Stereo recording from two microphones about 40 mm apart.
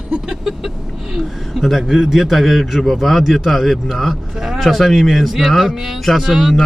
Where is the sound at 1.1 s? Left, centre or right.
Centre.